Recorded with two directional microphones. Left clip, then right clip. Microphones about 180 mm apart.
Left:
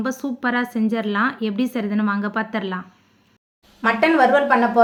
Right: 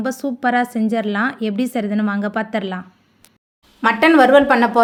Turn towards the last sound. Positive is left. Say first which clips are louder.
# right 4 dB
turn(degrees=-50)  # may be behind; listen again after turning